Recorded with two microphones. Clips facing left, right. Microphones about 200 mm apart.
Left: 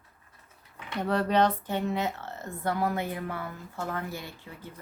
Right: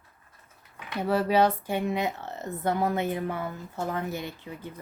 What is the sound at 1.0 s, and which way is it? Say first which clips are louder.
Speech: right 2 dB; 5° right (ahead or behind).